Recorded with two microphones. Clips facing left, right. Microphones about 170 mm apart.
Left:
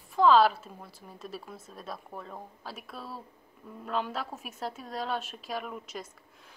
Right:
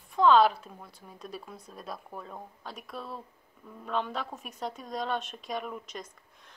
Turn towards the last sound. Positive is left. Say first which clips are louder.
# right 1 dB
turn(degrees=5)  # may be behind; listen again after turning